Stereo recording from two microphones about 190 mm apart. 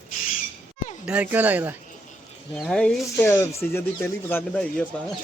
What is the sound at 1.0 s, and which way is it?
Speech, 10° right (ahead or behind).